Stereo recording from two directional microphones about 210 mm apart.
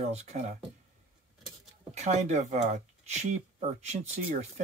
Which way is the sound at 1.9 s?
30° right (ahead or behind).